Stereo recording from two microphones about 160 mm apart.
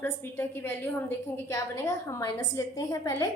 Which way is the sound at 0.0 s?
15° left (ahead or behind).